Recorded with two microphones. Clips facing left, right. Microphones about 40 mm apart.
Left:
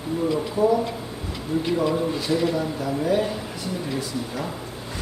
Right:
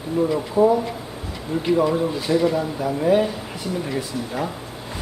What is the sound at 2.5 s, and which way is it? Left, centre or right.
Speech, centre.